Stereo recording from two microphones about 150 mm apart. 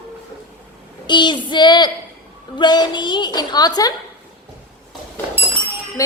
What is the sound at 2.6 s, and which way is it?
A woman's voice, 30° left (ahead or behind).